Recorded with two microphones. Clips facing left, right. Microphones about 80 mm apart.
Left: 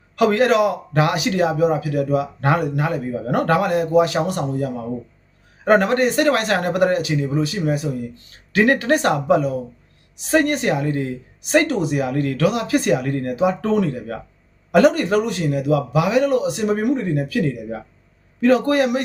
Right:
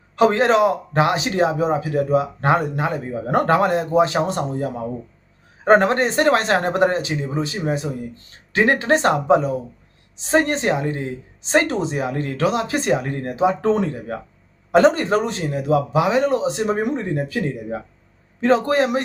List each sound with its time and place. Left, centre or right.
0.2 s a man's voice: right